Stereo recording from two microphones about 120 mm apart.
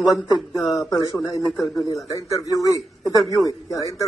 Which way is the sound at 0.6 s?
30° left (ahead or behind).